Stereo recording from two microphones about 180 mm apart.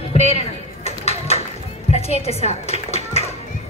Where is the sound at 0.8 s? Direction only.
35° left (ahead or behind).